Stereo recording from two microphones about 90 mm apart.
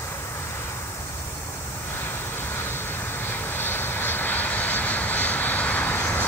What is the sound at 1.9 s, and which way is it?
Vehicle, 25° left (ahead or behind).